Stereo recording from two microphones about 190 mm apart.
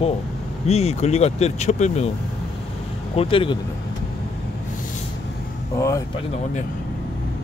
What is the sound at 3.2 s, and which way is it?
Speech, 30° left (ahead or behind).